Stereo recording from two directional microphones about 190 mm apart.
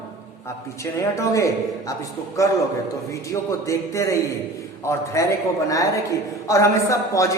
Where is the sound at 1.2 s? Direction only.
15° left (ahead or behind).